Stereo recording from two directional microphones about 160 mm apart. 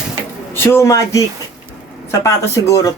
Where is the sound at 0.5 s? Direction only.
15° left (ahead or behind).